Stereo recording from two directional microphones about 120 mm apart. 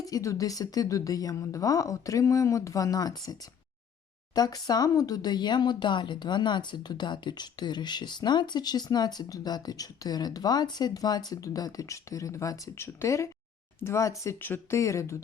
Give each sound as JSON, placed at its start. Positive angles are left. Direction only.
{"t": 0.0, "sound": "a woman's voice", "side_deg": 30}
{"t": 4.4, "sound": "a woman's voice", "side_deg": 30}